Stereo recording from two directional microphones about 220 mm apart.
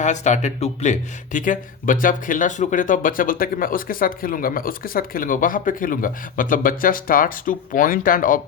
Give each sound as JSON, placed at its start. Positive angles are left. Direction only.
{"t": 0.0, "sound": "speech", "side_deg": 35}